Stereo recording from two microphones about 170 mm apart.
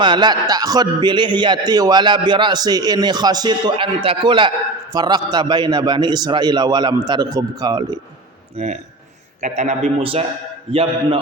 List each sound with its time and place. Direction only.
0.0 s a man's voice: 25° right (ahead or behind)
8.5 s a man's voice: 40° right (ahead or behind)